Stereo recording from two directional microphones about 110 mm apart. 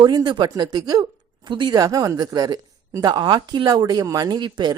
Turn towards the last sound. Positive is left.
turn(degrees=-40)  # may be behind; listen again after turning